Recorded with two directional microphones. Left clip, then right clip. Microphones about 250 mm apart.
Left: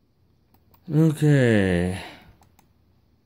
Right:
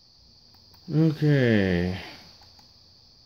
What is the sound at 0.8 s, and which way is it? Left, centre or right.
Speech, left.